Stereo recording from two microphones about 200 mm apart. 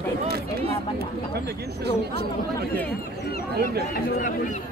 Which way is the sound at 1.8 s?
55° right (ahead or behind).